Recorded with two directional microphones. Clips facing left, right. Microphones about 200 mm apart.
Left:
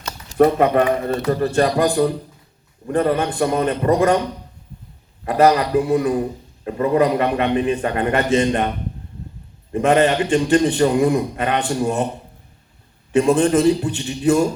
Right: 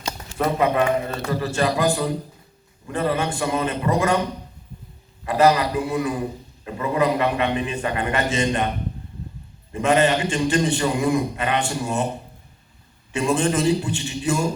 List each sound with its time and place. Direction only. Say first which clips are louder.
0.3 s a man's voice: left 6 dB; 55° left (ahead or behind)
5.2 s a man's voice: left 2 dB; 55° left (ahead or behind)
9.7 s a man's voice: left 3 dB; 55° left (ahead or behind)
13.1 s a man's voice: left 6 dB; 60° left (ahead or behind)